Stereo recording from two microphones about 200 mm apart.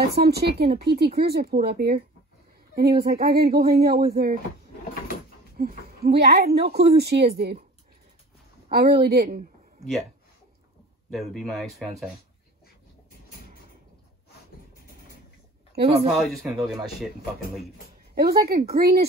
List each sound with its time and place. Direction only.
0.2 s speech: 50° right (ahead or behind)
5.9 s speech: 50° right (ahead or behind)
8.6 s speech: 50° right (ahead or behind)
11.1 s speech: centre (ahead or behind)
15.8 s speech: 30° right (ahead or behind)
16.1 s speech: centre (ahead or behind)
18.1 s speech: 50° right (ahead or behind)